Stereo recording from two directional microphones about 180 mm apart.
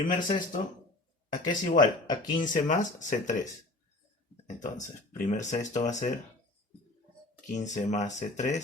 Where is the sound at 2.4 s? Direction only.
45° left (ahead or behind).